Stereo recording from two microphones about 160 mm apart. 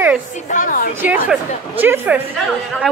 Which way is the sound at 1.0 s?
10° right (ahead or behind).